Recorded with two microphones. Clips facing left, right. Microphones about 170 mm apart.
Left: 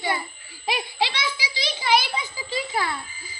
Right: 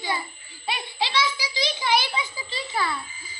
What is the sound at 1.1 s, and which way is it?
A child's voice, 55° left (ahead or behind).